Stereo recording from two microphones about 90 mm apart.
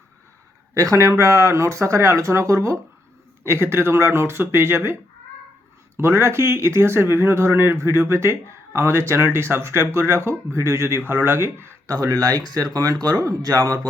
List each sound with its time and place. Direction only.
0.7 s speech: 40° right (ahead or behind)
6.0 s speech: 30° right (ahead or behind)
11.9 s speech: 45° right (ahead or behind)